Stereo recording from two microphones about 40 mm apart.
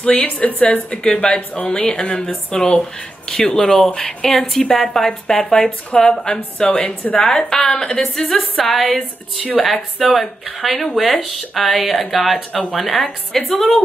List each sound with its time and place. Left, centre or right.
0.0 s speech: left
1.7 s speech: left
6.7 s speech: left
7.2 s speech: centre
8.0 s speech: centre